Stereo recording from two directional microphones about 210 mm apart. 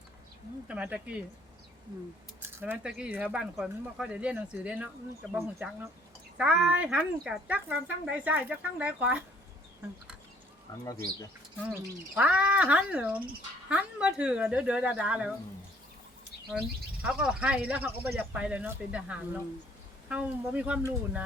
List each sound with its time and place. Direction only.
0.7 s speech: 5° right (ahead or behind)
2.4 s speech: 10° right (ahead or behind)
10.7 s speech: 20° left (ahead or behind)
11.7 s speech: 5° right (ahead or behind)
16.5 s speech: 5° right (ahead or behind)